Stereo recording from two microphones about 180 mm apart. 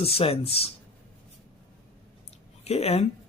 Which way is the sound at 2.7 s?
35° left (ahead or behind).